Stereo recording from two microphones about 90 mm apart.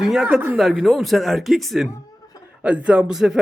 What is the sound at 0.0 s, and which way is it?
Speech, 5° right (ahead or behind).